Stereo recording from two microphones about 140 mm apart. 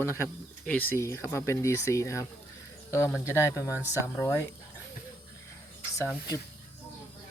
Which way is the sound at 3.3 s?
20° left (ahead or behind).